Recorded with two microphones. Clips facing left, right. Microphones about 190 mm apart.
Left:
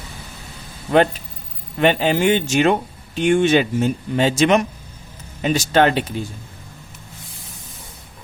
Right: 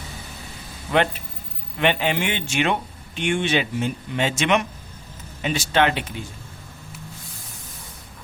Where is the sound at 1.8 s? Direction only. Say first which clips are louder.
Left 5 dB; 40° left (ahead or behind).